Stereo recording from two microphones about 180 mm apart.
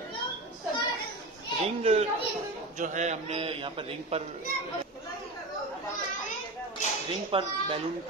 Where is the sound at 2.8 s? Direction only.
40° right (ahead or behind).